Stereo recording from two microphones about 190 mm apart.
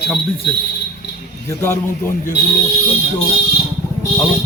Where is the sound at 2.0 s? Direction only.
45° left (ahead or behind).